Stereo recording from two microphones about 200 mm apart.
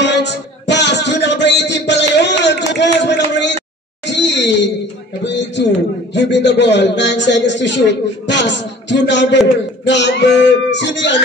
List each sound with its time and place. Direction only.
0.0 s music: 60° left (ahead or behind)
4.0 s a sound: 60° left (ahead or behind)
6.1 s a man's voice: 60° left (ahead or behind)